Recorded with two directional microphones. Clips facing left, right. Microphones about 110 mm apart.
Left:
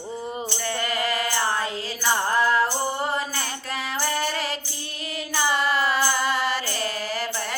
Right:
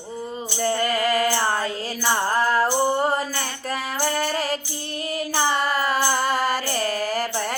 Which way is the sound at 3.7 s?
40° right (ahead or behind).